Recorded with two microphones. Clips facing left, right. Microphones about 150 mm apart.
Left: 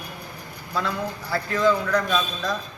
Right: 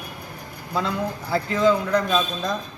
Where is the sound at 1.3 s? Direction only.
20° right (ahead or behind).